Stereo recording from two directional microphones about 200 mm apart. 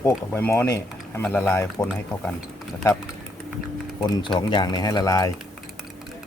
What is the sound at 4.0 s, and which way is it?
Speech, 25° left (ahead or behind).